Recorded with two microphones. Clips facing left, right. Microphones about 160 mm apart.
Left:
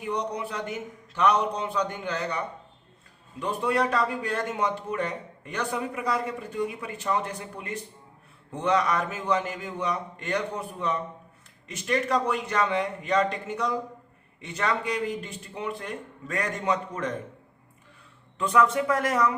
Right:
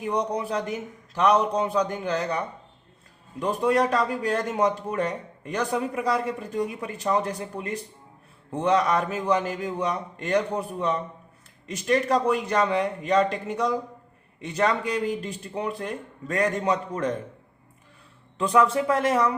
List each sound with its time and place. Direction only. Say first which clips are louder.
0.0 s a man's voice: right 4 dB; 35° right (ahead or behind)
3.4 s a man's voice: right 4 dB; 40° right (ahead or behind)
14.4 s a man's voice: right 4 dB; 35° right (ahead or behind)
18.3 s a man's voice: right 2 dB; 30° right (ahead or behind)